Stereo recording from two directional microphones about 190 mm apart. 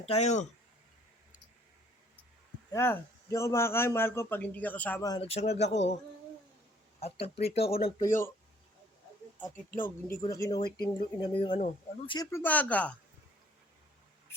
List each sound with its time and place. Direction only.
0.0 s speech: 35° left (ahead or behind)
2.7 s a man's voice: 15° left (ahead or behind)
5.0 s speech: 20° left (ahead or behind)
5.3 s speech: 35° left (ahead or behind)
7.0 s speech: 30° left (ahead or behind)
7.9 s speech: 20° left (ahead or behind)
10.2 s speech: 15° left (ahead or behind)